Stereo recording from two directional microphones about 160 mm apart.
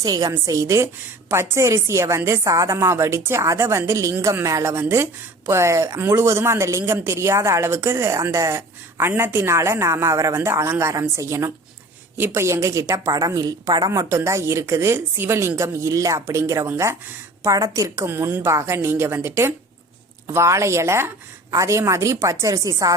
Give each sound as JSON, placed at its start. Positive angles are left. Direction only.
{"t": 0.0, "sound": "a woman's voice", "side_deg": -20}